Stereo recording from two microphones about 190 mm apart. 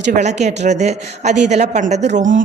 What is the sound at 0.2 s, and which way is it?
A woman's voice, 35° right (ahead or behind).